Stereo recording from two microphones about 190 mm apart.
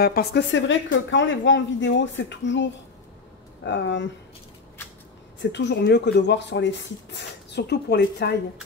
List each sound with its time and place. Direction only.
0.0 s a woman's voice: 55° left (ahead or behind)
5.4 s speech: 65° left (ahead or behind)